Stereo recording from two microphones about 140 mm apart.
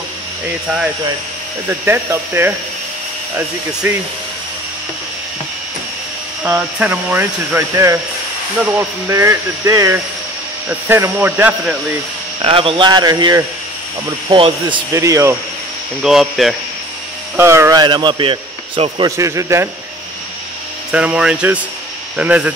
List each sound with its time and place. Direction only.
1.7 s speech: 15° right (ahead or behind)
3.8 s speech: 15° right (ahead or behind)
6.4 s speech: 10° right (ahead or behind)
12.4 s a man's voice: 40° right (ahead or behind)
14.3 s a man's voice: 35° right (ahead or behind)
14.9 s speech: 20° right (ahead or behind)
16.0 s speech: centre (ahead or behind)
17.4 s a man's voice: 20° right (ahead or behind); by 19.0 s 40° right (ahead or behind)
19.0 s speech: 20° right (ahead or behind)
20.9 s speech: 10° right (ahead or behind)